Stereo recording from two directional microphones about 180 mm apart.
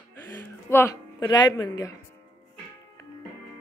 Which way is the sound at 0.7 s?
15° left (ahead or behind).